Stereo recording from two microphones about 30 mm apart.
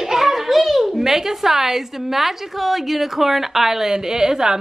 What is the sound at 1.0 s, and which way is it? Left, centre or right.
A woman's voice, centre.